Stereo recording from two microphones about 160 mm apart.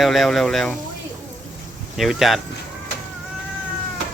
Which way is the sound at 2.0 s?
Centre (ahead or behind).